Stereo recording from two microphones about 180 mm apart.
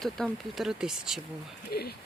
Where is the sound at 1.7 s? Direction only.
60° left (ahead or behind).